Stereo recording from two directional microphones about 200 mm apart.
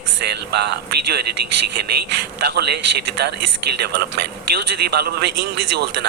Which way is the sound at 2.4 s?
55° right (ahead or behind).